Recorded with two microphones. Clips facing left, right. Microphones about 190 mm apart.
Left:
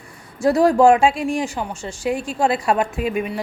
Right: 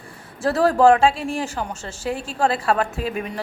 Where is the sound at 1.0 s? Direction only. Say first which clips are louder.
Left 2 dB; 35° right (ahead or behind).